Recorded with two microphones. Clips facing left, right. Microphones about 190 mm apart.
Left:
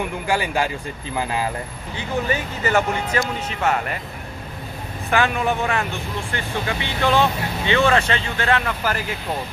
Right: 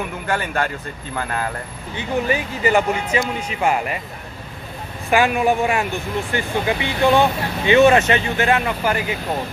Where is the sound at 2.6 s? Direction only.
10° right (ahead or behind).